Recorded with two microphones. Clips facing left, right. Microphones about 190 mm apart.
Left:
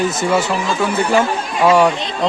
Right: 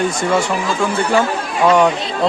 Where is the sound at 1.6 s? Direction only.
10° left (ahead or behind).